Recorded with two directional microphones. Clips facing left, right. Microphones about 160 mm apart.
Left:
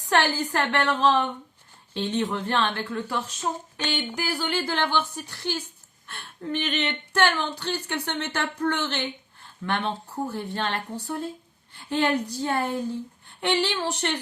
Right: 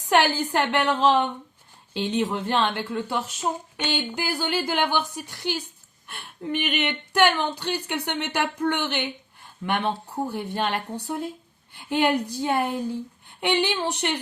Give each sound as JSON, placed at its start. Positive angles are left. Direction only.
{"t": 0.1, "sound": "speech", "side_deg": -15}